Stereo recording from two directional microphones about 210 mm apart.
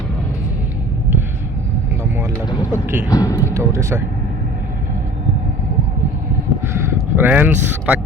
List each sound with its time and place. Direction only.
2.7 s speech: 10° right (ahead or behind)
3.1 s speech: 15° left (ahead or behind)
3.5 s speech: 15° right (ahead or behind)
6.7 s speech: 10° right (ahead or behind)